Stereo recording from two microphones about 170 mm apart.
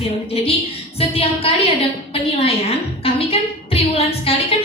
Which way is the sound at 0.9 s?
35° left (ahead or behind).